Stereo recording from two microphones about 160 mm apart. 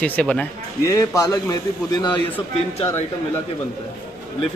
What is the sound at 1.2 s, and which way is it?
A man's voice, 20° left (ahead or behind).